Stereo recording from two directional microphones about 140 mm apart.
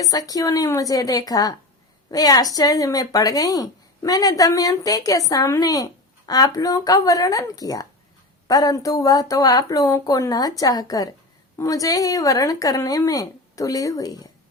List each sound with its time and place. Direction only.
0.0 s a woman's voice: 25° left (ahead or behind)